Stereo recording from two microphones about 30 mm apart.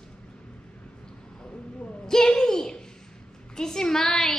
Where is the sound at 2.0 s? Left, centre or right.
Centre.